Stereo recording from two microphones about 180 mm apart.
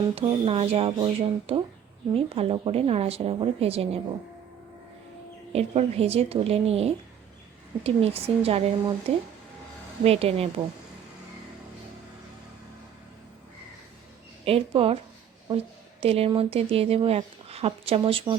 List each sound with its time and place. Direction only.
0.2 s speech: 35° right (ahead or behind)
5.5 s speech: 35° right (ahead or behind)
14.4 s speech: 30° right (ahead or behind)